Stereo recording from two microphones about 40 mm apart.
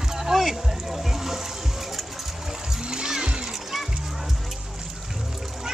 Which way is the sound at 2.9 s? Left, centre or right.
Centre.